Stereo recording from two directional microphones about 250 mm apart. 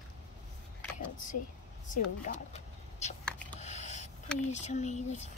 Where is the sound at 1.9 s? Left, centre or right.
Left.